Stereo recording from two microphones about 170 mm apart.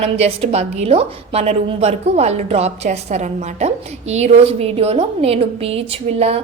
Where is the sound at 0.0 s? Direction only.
35° right (ahead or behind).